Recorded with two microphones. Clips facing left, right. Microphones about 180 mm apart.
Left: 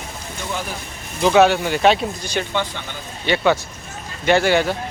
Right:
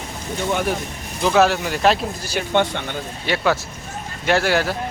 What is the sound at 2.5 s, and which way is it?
Speech, 60° right (ahead or behind).